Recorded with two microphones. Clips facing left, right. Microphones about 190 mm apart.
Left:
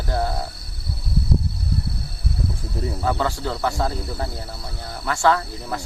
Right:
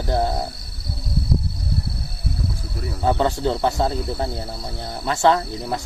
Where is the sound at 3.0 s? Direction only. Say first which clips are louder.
Right 5 dB; 20° right (ahead or behind).